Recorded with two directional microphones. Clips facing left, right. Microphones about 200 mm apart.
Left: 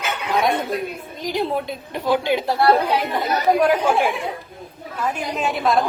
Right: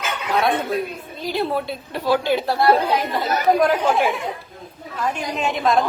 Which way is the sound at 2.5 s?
Centre (ahead or behind).